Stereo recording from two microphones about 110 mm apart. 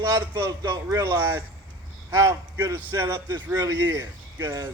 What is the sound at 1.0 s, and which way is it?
A man's voice, 20° right (ahead or behind).